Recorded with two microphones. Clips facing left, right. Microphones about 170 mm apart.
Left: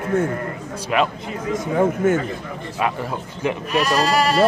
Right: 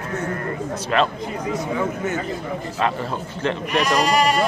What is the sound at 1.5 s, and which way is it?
Speech, 50° left (ahead or behind).